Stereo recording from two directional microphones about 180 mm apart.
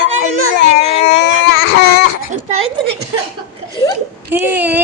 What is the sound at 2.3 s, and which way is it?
Speech, 35° right (ahead or behind).